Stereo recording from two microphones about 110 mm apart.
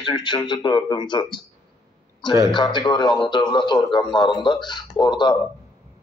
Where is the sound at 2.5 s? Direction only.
45° left (ahead or behind).